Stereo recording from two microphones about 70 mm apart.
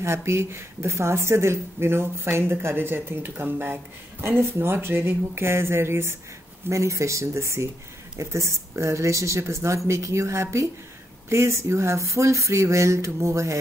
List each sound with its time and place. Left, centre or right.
0.0 s speech: right